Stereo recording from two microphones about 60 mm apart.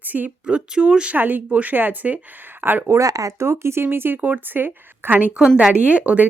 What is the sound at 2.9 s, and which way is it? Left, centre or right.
Speech, right.